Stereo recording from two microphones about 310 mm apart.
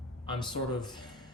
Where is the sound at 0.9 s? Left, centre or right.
Centre.